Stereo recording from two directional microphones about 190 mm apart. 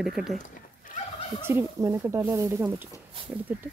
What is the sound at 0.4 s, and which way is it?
Chicken, 45° left (ahead or behind).